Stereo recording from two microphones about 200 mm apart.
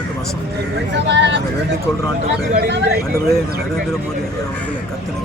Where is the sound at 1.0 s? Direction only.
60° right (ahead or behind).